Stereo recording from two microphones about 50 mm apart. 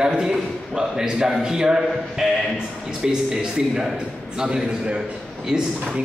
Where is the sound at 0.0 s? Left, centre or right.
Centre.